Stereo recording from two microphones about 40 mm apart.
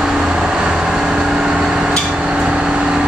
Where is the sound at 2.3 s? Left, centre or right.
Right.